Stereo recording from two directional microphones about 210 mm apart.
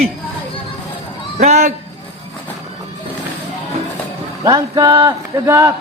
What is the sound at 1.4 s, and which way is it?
Speech, 30° right (ahead or behind).